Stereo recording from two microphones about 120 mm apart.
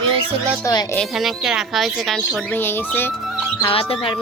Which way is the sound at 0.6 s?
35° left (ahead or behind).